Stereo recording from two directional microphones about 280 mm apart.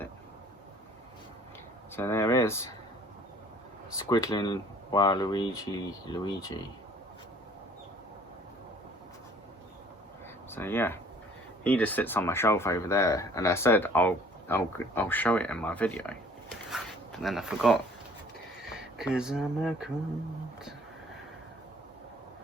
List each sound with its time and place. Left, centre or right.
2.0 s speech: centre
4.1 s speech: centre
10.5 s speech: centre
16.6 s a sound: centre
18.6 s speech: centre